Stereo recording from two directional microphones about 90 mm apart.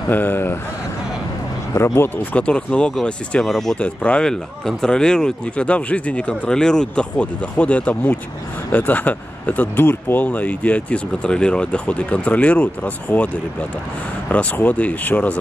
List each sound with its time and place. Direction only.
0.1 s speech: 20° left (ahead or behind)
1.8 s speech: 30° left (ahead or behind)
2.3 s speech: 10° left (ahead or behind)
14.3 s speech: 15° left (ahead or behind)